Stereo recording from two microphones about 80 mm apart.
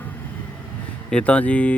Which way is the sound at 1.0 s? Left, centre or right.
Centre.